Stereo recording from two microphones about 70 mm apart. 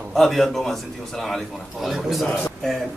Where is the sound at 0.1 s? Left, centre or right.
Centre.